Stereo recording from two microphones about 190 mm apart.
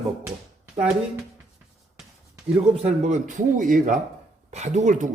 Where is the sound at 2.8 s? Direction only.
40° right (ahead or behind).